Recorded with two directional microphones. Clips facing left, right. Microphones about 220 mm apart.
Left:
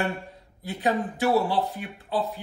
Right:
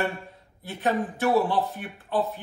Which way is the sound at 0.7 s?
15° left (ahead or behind).